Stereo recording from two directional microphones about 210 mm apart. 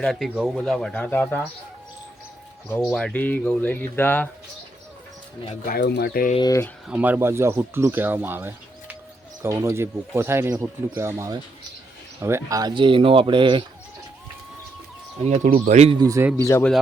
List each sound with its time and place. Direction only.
0.0 s speech: centre (ahead or behind)
2.6 s speech: 5° left (ahead or behind)
5.6 s speech: 50° left (ahead or behind)
6.3 s speech: 15° left (ahead or behind)
6.8 s speech: 5° right (ahead or behind); by 13.7 s 25° right (ahead or behind)
15.5 s speech: 35° right (ahead or behind)
16.0 s speech: 15° right (ahead or behind)
16.4 s speech: 15° left (ahead or behind)